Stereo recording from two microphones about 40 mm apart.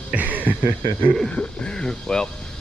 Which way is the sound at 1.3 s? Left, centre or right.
Left.